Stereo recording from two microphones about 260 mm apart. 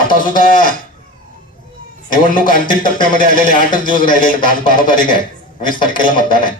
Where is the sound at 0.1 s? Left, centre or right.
Left.